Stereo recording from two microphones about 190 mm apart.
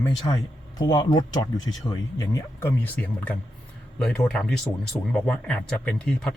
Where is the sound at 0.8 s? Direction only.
20° left (ahead or behind).